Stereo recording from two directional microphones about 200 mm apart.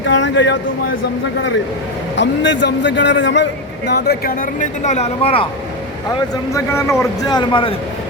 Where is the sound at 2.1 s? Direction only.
65° left (ahead or behind).